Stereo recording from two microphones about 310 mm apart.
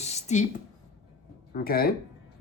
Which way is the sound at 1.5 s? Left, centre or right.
Left.